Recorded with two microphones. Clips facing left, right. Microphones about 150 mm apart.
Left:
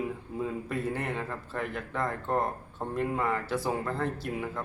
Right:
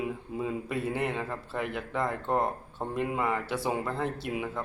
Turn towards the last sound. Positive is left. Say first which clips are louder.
# right 1 dB
turn(degrees=-5)  # may be behind; listen again after turning